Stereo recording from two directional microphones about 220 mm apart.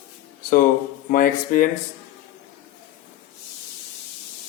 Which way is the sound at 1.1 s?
40° left (ahead or behind).